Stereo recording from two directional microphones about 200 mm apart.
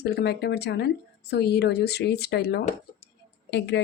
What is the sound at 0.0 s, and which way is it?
Speech, 55° left (ahead or behind).